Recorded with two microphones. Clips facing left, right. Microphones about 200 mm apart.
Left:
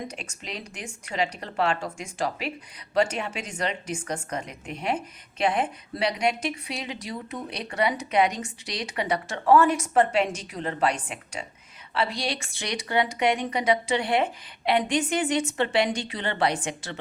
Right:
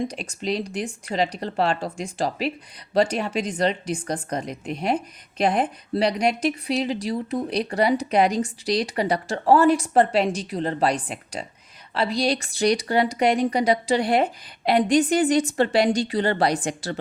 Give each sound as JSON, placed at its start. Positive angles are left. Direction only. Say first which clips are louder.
{"t": 0.1, "sound": "a woman's voice", "louder": "right 10 dB", "side_deg": -35}